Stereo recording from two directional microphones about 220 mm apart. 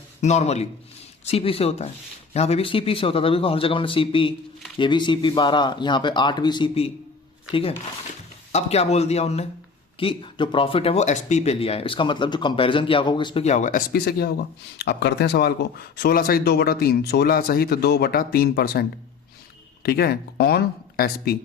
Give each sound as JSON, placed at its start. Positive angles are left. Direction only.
{"t": 0.2, "sound": "speech", "side_deg": 30}
{"t": 8.5, "sound": "speech", "side_deg": 30}